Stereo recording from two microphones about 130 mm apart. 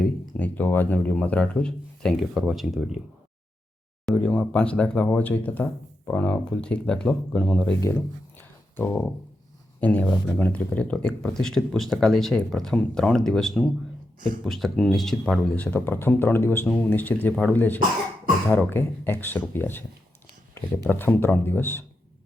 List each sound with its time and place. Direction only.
0.0 s speech: 10° left (ahead or behind)
4.1 s speech: 10° left (ahead or behind)
7.9 s a sound: 15° left (ahead or behind)
9.8 s speech: 10° left (ahead or behind)
20.9 s speech: 15° left (ahead or behind)